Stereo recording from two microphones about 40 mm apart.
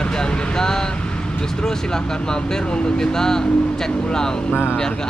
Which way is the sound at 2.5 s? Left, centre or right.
Centre.